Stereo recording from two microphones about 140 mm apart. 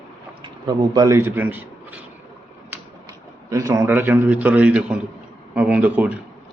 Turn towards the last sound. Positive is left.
turn(degrees=-10)  # may be behind; listen again after turning